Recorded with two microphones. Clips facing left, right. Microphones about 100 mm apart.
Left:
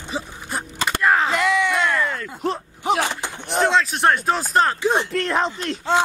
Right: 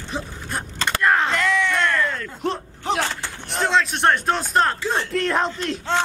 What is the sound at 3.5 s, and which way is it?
A man's voice, centre (ahead or behind).